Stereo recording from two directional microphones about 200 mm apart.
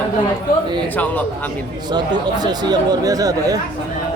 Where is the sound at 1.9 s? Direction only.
20° right (ahead or behind).